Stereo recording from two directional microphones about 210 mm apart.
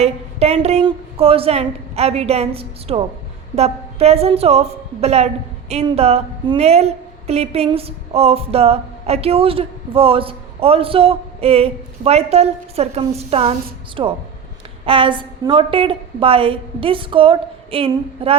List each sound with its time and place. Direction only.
0.0 s a woman's voice: 30° right (ahead or behind)